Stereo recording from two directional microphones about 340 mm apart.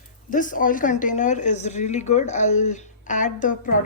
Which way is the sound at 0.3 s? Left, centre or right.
Left.